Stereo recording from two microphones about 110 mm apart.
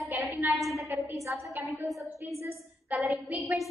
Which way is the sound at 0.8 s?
25° right (ahead or behind).